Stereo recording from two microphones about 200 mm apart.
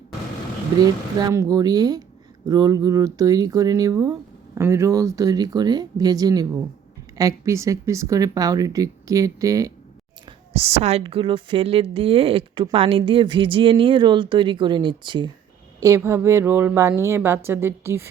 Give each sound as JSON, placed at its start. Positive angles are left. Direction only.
{"t": 0.8, "sound": "speech", "side_deg": -15}
{"t": 10.2, "sound": "speech", "side_deg": -30}
{"t": 16.0, "sound": "speech", "side_deg": -15}